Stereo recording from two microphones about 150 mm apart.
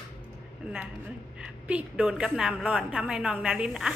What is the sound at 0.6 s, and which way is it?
A woman's voice, 5° right (ahead or behind).